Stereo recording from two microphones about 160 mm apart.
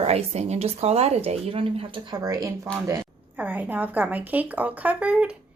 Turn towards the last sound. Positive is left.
turn(degrees=-10)  # may be behind; listen again after turning